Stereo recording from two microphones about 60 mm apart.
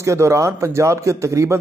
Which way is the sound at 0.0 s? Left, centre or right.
Right.